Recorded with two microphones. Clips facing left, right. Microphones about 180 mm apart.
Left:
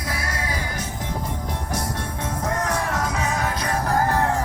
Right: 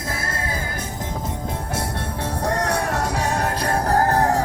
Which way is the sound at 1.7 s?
30° right (ahead or behind).